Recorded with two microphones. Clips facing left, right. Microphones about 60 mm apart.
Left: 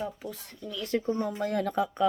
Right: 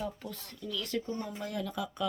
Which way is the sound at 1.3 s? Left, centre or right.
Left.